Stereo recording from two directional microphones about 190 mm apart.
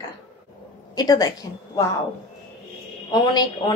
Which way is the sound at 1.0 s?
20° left (ahead or behind).